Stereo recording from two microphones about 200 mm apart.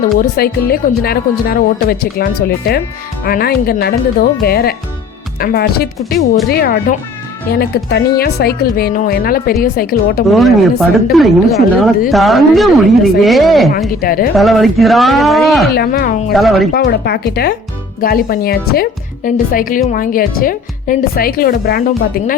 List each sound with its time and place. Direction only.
0.0 s speech: 50° left (ahead or behind)
10.2 s a woman's voice: centre (ahead or behind)
14.0 s speech: 45° left (ahead or behind)
14.3 s a woman's voice: centre (ahead or behind)
15.7 s speech: 50° left (ahead or behind)
16.3 s a woman's voice: centre (ahead or behind)
16.7 s speech: 50° left (ahead or behind)